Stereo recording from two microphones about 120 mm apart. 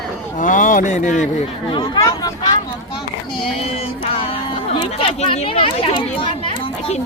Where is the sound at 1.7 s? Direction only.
40° left (ahead or behind).